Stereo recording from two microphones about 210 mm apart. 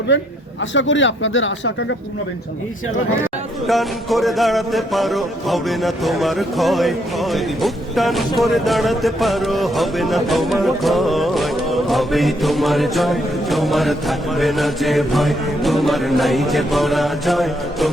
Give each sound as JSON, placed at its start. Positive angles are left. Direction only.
{"t": 0.7, "sound": "speech", "side_deg": 60}
{"t": 3.7, "sound": "speech", "side_deg": 0}